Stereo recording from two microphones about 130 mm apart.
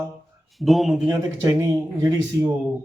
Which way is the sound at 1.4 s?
25° right (ahead or behind).